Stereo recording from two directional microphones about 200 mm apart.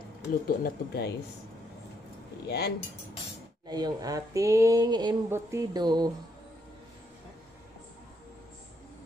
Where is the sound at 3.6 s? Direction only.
20° right (ahead or behind).